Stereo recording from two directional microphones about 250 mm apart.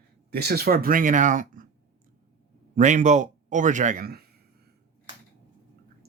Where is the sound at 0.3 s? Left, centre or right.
Right.